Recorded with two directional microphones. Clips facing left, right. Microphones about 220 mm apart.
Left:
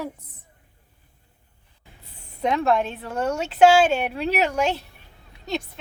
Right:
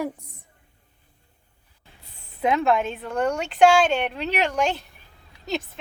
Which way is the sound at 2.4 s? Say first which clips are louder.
Even; centre (ahead or behind).